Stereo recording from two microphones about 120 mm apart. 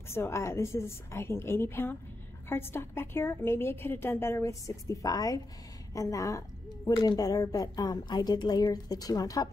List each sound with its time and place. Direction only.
0.1 s a woman's voice: 20° left (ahead or behind)